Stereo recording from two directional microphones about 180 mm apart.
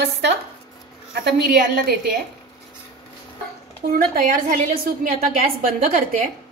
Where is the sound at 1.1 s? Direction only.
60° right (ahead or behind).